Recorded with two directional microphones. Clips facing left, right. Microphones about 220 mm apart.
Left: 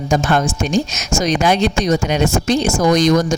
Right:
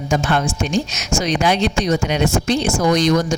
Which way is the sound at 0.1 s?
40° left (ahead or behind).